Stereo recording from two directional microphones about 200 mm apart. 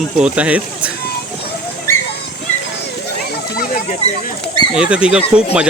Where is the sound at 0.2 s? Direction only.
5° right (ahead or behind).